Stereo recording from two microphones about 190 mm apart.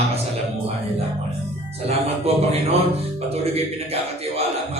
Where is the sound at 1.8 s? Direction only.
35° right (ahead or behind).